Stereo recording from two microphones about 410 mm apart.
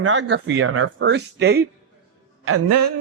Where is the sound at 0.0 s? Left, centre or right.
Right.